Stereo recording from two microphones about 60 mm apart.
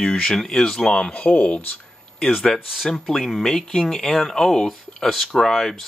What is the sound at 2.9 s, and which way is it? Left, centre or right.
Speech, centre.